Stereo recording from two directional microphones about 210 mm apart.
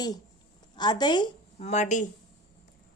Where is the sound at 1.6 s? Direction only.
35° left (ahead or behind).